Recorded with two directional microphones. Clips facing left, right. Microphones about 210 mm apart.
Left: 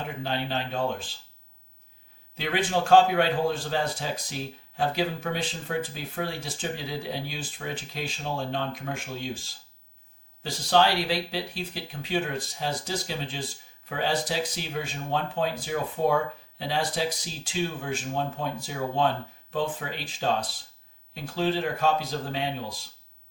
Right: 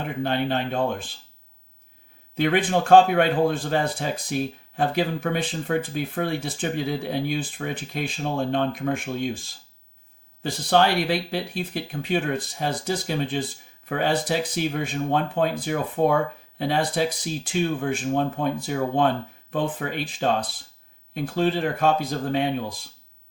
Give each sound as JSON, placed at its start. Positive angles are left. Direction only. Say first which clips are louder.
{"t": 0.2, "sound": "speech", "louder": "right 7 dB", "side_deg": -55}
{"t": 2.4, "sound": "speech", "louder": "right 5 dB", "side_deg": -55}
{"t": 10.4, "sound": "speech", "louder": "right 3 dB", "side_deg": -55}
{"t": 21.3, "sound": "speech", "louder": "right 3 dB", "side_deg": -55}